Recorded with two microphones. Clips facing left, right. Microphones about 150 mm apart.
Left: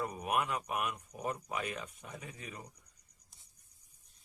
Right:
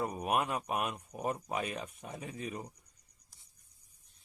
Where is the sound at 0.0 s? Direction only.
25° right (ahead or behind).